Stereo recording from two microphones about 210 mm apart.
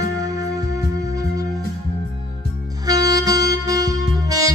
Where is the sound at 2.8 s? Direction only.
15° right (ahead or behind).